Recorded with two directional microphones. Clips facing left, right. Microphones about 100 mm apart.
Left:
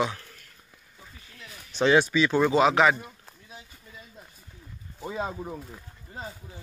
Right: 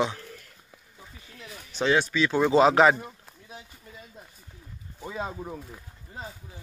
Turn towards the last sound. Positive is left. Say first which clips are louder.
# left 1 dB
turn(degrees=0)  # may be behind; listen again after turning